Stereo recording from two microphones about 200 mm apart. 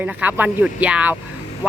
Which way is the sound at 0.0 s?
10° right (ahead or behind).